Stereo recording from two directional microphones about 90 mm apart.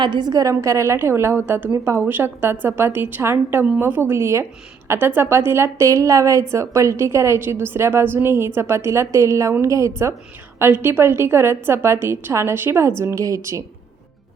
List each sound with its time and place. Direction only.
0.0 s a woman's voice: 55° right (ahead or behind); by 13.7 s 35° right (ahead or behind)